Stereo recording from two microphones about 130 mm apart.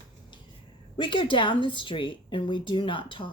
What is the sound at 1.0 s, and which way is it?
Speech, 40° left (ahead or behind).